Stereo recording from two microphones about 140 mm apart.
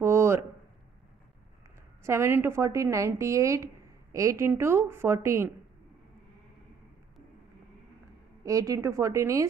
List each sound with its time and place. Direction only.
0.0 s a sound: 20° right (ahead or behind)
2.0 s a woman's voice: 20° right (ahead or behind)
8.5 s a woman's voice: 25° right (ahead or behind)